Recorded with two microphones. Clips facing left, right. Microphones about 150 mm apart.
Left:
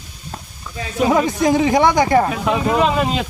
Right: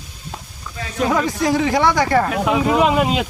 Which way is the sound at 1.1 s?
20° left (ahead or behind).